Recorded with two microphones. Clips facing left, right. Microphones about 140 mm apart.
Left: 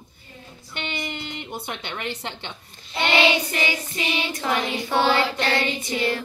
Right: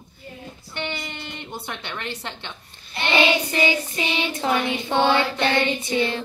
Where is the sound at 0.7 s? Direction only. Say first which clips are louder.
Even; 20° left (ahead or behind).